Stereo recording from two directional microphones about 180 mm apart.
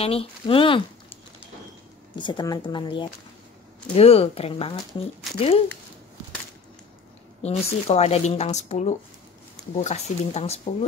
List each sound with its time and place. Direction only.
0.0 s speech: 30° left (ahead or behind)
2.1 s speech: 25° left (ahead or behind)
7.4 s speech: 35° left (ahead or behind)